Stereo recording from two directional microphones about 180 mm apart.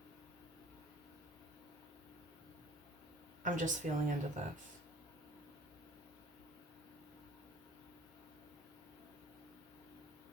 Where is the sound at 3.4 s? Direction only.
45° right (ahead or behind).